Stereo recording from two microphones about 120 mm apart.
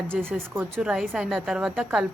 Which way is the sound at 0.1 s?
20° right (ahead or behind).